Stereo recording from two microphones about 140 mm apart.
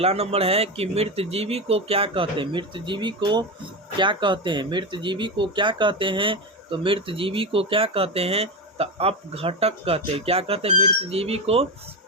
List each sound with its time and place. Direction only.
0.0 s speech: 45° right (ahead or behind)